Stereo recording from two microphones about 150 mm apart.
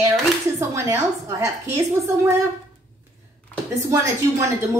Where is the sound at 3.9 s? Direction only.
20° right (ahead or behind).